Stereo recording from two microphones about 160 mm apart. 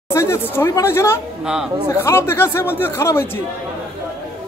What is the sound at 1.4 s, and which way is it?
Speech, 5° right (ahead or behind).